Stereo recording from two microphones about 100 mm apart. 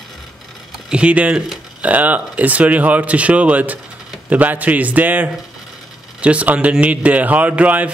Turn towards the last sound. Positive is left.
turn(degrees=-15)  # may be behind; listen again after turning